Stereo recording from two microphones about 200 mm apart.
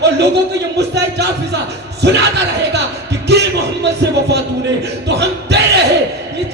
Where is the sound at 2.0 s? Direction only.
60° right (ahead or behind).